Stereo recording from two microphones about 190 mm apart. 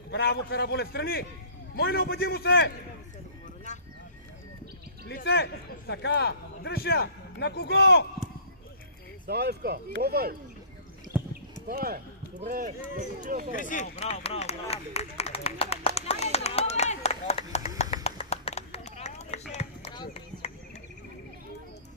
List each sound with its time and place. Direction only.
0.1 s a man's voice: 60° left (ahead or behind)
5.0 s a man's voice: 60° left (ahead or behind)
9.3 s speech: 55° right (ahead or behind)
11.1 s clip-clop: 10° right (ahead or behind)
11.7 s speech: 50° right (ahead or behind)
13.5 s a sound: 40° left (ahead or behind)
17.9 s run: 35° left (ahead or behind)
19.9 s a sound: 25° left (ahead or behind)